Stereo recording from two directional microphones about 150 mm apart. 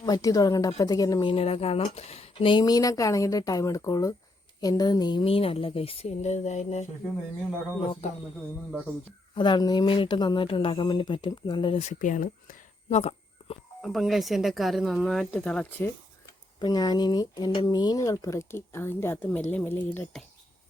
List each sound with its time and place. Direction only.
0.0 s speech: 25° left (ahead or behind); by 6.8 s 50° left (ahead or behind)
9.3 s speech: 30° left (ahead or behind)
11.8 s speech: 55° left (ahead or behind)
13.8 s speech: centre (ahead or behind)
16.6 s speech: 25° left (ahead or behind)